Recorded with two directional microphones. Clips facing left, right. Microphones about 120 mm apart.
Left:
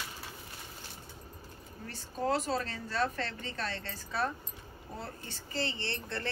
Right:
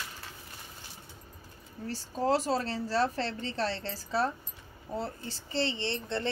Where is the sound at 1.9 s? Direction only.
30° right (ahead or behind).